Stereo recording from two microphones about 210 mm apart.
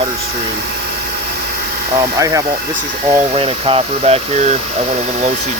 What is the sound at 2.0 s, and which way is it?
Speech, 15° right (ahead or behind).